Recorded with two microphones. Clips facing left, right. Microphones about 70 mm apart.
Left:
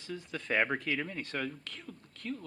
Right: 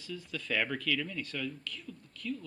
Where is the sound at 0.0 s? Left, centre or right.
Left.